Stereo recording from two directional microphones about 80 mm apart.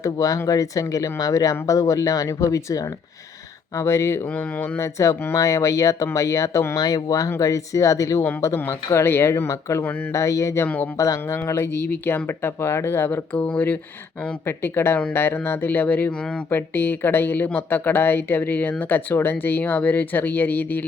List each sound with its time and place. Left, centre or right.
0.0 s speech: left
6.7 s speech: left
8.5 s speech: left
13.3 s speech: centre
14.4 s speech: left